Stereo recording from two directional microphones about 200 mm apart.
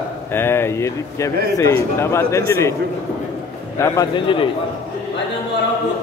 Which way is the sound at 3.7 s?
15° left (ahead or behind).